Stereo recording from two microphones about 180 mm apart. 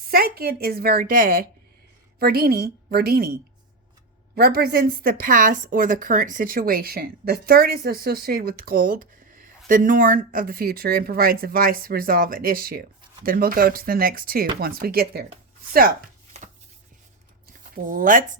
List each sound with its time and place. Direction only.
0.1 s a woman's voice: 60° right (ahead or behind)
4.4 s a woman's voice: 60° right (ahead or behind)
17.6 s speech: 50° right (ahead or behind)